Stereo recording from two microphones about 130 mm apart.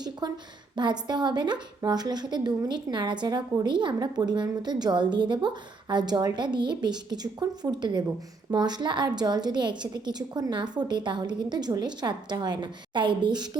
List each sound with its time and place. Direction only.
0.2 s a woman's voice: 30° right (ahead or behind)